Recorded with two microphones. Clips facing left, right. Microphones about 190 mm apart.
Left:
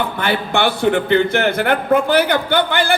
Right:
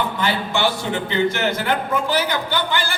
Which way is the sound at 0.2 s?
60° left (ahead or behind).